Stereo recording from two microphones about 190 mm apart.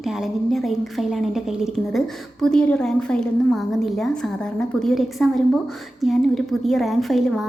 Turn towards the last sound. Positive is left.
turn(degrees=0)  # may be behind; listen again after turning